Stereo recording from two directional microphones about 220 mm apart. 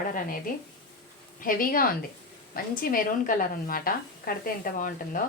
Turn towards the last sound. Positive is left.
turn(degrees=40)  # may be behind; listen again after turning